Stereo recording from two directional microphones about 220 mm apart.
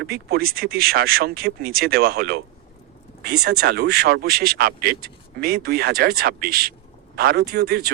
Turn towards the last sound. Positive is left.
turn(degrees=-45)  # may be behind; listen again after turning